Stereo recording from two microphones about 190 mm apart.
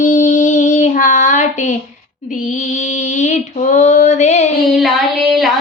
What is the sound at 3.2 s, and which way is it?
Female singing, 40° left (ahead or behind).